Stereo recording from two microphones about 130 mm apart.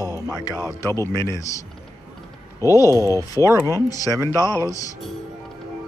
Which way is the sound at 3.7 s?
25° left (ahead or behind).